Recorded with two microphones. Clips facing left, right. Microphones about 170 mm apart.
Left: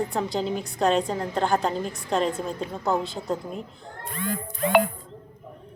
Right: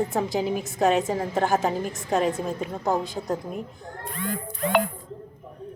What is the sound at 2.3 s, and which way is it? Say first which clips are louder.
Speech: right 1 dB; 15° right (ahead or behind).